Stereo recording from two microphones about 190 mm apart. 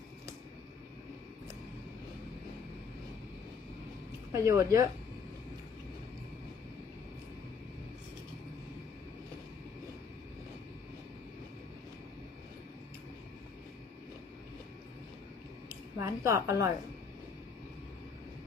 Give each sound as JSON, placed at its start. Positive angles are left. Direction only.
{"t": 4.3, "sound": "speech", "side_deg": -15}
{"t": 16.0, "sound": "a woman's voice", "side_deg": -15}